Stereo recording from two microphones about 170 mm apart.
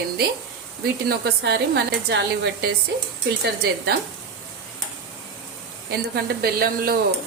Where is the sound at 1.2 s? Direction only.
70° right (ahead or behind).